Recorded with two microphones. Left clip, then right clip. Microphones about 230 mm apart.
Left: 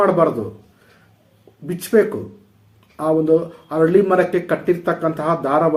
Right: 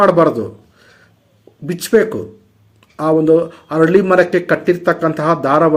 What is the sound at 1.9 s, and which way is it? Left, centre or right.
Speech, right.